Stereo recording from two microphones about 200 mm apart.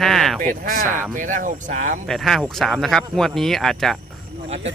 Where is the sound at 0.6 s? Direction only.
45° right (ahead or behind).